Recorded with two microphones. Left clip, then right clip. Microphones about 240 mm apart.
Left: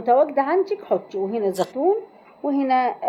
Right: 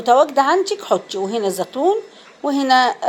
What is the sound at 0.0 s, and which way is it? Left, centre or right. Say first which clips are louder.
Speech: right 4 dB; centre.